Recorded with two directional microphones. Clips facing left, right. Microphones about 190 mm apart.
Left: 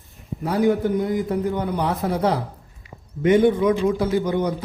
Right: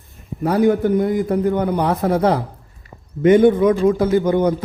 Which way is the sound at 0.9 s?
55° right (ahead or behind).